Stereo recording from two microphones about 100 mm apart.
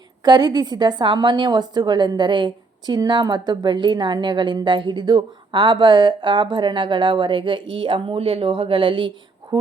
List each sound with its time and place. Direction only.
0.3 s a woman's voice: 45° right (ahead or behind)